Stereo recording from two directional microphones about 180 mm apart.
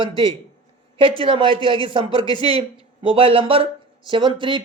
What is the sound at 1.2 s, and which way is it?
Speech, 30° right (ahead or behind).